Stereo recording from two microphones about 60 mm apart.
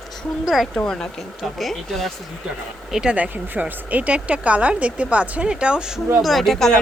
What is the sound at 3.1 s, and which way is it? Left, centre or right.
Speech, right.